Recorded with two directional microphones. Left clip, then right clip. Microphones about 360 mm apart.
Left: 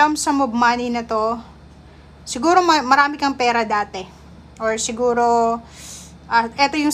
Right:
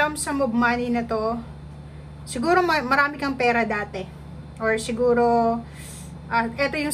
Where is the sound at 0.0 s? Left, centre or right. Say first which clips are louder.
Left 6 dB; centre.